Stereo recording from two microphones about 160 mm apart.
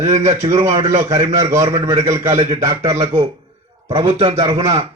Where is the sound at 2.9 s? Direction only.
40° right (ahead or behind).